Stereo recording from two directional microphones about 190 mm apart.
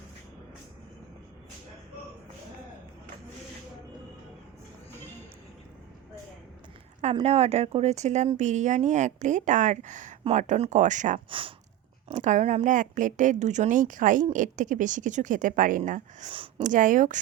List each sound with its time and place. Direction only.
7.0 s a woman's voice: 35° right (ahead or behind)
11.3 s a sound: 25° right (ahead or behind)
12.0 s a woman's voice: 40° right (ahead or behind)
16.6 s a woman's voice: 45° right (ahead or behind)